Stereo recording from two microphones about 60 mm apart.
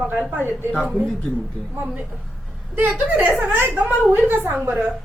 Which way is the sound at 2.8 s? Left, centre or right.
Right.